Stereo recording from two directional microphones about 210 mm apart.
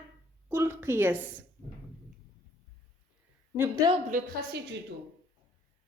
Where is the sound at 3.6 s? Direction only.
15° right (ahead or behind).